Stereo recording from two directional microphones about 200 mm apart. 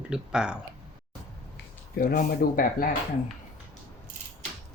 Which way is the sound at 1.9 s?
50° left (ahead or behind).